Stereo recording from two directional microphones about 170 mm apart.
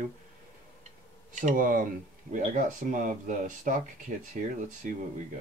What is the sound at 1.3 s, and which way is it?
Speech, 50° right (ahead or behind).